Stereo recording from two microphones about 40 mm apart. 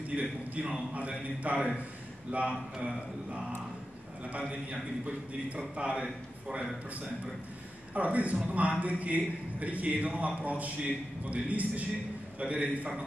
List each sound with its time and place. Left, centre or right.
0.1 s a man's voice: right
4.3 s a man's voice: right
7.9 s a man's voice: right